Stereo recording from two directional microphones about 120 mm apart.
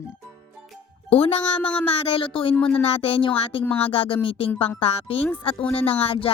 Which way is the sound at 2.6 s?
15° left (ahead or behind).